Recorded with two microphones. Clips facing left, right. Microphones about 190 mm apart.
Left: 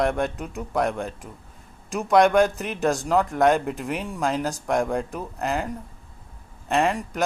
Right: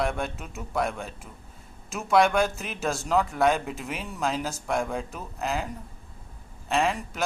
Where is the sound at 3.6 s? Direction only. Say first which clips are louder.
Left 6 dB; 50° left (ahead or behind).